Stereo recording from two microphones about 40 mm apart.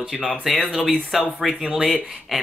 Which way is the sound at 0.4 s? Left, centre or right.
Centre.